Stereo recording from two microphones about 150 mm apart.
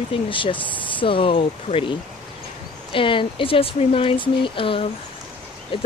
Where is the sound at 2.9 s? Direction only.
35° left (ahead or behind).